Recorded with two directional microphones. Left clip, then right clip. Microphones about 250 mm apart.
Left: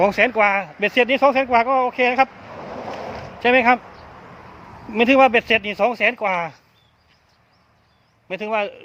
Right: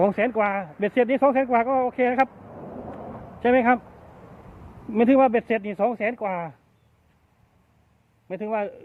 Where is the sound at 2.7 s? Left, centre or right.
Left.